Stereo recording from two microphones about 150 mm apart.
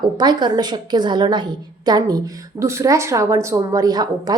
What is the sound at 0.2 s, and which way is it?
A woman's voice, 30° right (ahead or behind).